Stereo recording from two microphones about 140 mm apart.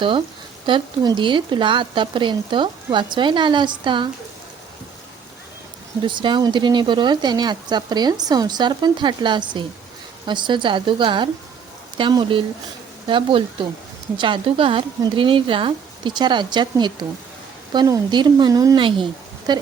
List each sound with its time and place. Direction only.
0.6 s speech: 35° right (ahead or behind)
6.1 s speech: 35° right (ahead or behind)